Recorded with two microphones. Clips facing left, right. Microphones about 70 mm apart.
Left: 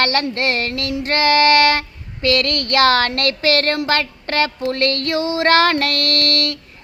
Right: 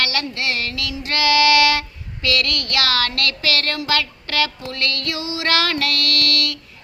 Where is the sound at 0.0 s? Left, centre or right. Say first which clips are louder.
Left 5 dB; left.